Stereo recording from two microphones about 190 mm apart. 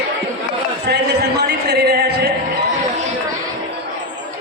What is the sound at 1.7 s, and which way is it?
Music, 60° right (ahead or behind).